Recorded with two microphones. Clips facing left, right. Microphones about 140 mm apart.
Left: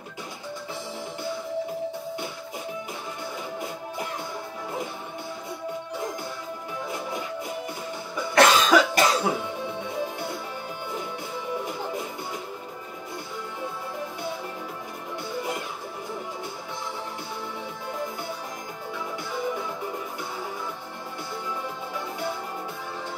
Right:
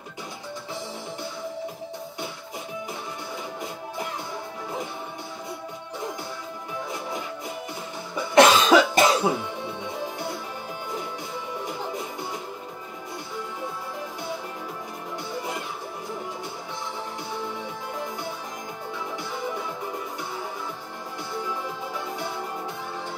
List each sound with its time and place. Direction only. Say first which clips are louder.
8.4 s cough: right 2 dB; 25° right (ahead or behind)